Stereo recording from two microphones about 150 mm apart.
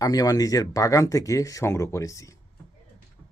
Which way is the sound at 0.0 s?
25° left (ahead or behind).